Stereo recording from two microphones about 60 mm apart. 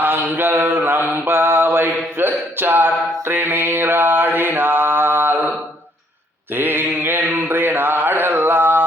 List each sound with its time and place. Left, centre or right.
0.0 s mantra: right
6.5 s mantra: right